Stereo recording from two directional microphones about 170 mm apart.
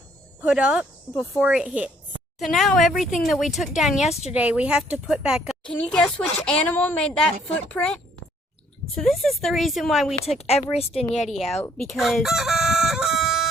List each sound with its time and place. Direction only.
0.4 s a woman's voice: 5° right (ahead or behind)
9.0 s speech: centre (ahead or behind)
10.2 s speech: 40° left (ahead or behind)
11.3 s speech: centre (ahead or behind)
11.8 s crowing: centre (ahead or behind)